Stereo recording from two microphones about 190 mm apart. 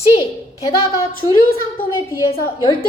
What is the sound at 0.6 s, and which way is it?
Speech, 20° left (ahead or behind).